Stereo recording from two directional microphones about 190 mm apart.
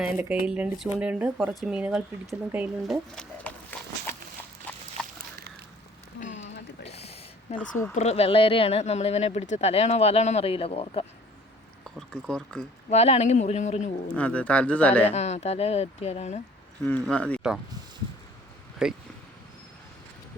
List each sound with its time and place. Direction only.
0.0 s speech: 10° right (ahead or behind)
3.2 s a sound: 5° left (ahead or behind)
6.1 s a sound: 40° left (ahead or behind)
7.5 s speech: 35° left (ahead or behind)
11.9 s speech: 5° left (ahead or behind)
12.9 s speech: 35° left (ahead or behind)
14.2 s speech: 5° left (ahead or behind)
15.1 s speech: 35° left (ahead or behind)
16.8 s speech: 10° left (ahead or behind)
18.8 s speech: 5° right (ahead or behind)